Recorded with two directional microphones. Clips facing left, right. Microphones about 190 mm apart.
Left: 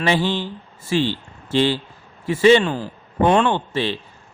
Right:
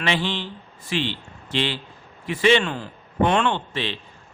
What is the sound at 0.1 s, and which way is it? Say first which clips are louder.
A man's voice: left 5 dB; 40° left (ahead or behind).